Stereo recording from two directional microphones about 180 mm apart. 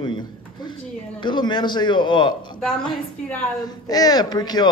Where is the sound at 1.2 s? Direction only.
25° left (ahead or behind).